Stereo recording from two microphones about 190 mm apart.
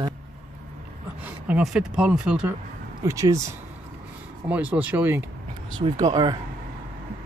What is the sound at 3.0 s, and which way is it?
Speech, 15° right (ahead or behind).